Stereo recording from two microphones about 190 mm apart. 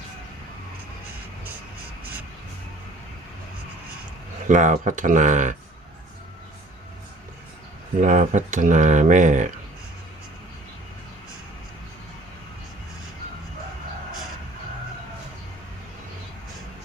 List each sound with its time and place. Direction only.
4.4 s speech: 40° right (ahead or behind)
8.0 s speech: 40° right (ahead or behind)